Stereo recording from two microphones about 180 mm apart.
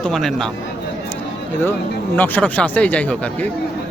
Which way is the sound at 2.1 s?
10° left (ahead or behind).